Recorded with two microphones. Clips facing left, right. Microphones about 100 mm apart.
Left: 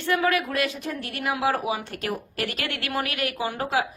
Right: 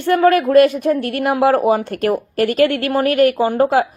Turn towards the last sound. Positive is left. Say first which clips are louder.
# right 11 dB
turn(degrees=-50)  # may be behind; listen again after turning